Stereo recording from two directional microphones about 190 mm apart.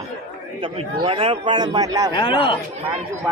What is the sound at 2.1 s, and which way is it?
Speech, 25° left (ahead or behind).